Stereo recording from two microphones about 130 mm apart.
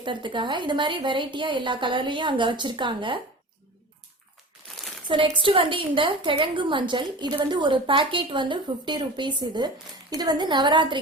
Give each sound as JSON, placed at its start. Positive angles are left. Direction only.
{"t": 0.0, "sound": "a woman's voice", "side_deg": -40}
{"t": 5.0, "sound": "a woman's voice", "side_deg": -40}